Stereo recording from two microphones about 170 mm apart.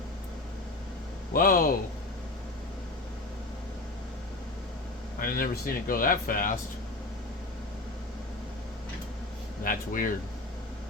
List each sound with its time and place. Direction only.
1.3 s speech: 60° left (ahead or behind)
5.2 s speech: 60° left (ahead or behind)
9.6 s speech: 55° left (ahead or behind)